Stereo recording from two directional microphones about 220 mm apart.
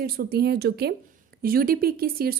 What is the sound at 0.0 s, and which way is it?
Speech, 45° right (ahead or behind).